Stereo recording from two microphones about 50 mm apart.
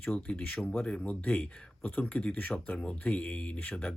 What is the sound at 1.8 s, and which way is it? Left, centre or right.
Speech, left.